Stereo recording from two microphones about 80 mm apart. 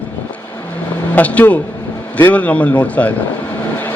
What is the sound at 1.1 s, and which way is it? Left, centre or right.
A man's voice, centre.